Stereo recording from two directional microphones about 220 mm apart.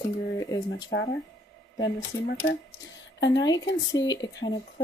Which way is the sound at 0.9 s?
50° left (ahead or behind).